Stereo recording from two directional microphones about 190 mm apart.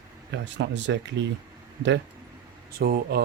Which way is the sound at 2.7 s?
55° right (ahead or behind).